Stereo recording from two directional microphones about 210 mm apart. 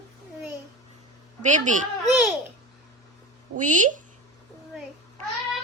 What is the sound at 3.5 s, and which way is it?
Speech, 35° right (ahead or behind).